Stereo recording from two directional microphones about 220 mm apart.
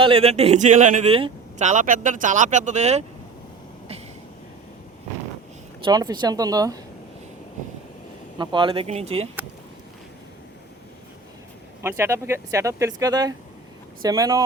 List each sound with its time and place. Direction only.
0.0 s speech: 25° right (ahead or behind)
5.8 s speech: 20° right (ahead or behind)
8.4 s speech: 20° right (ahead or behind)
11.8 s speech: 10° right (ahead or behind)